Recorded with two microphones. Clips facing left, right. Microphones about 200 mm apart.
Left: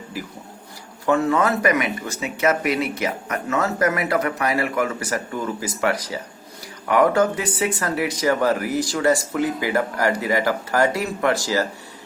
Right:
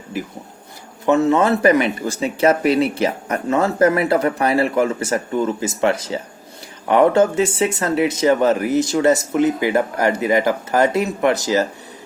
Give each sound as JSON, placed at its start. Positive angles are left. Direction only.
{"t": 0.1, "sound": "speech", "side_deg": -20}